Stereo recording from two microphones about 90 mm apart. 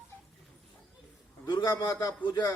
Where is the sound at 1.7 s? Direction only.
30° left (ahead or behind).